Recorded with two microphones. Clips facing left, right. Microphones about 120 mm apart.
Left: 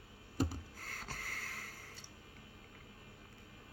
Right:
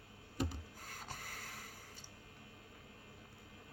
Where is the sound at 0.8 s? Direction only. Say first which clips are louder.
Left 2 dB; 20° right (ahead or behind).